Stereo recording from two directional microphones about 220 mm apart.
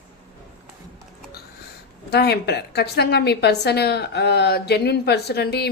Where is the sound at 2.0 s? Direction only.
50° left (ahead or behind).